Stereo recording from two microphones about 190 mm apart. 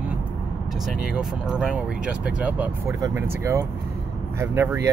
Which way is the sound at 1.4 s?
5° right (ahead or behind).